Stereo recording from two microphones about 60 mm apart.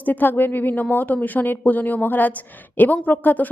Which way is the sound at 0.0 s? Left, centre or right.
Left.